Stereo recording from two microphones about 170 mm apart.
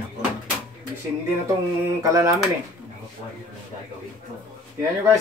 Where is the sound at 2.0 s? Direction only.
20° right (ahead or behind).